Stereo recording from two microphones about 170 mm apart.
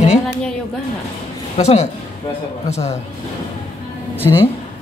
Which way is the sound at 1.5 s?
40° left (ahead or behind).